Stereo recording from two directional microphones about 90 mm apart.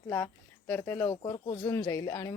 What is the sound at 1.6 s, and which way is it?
Speech, 35° left (ahead or behind).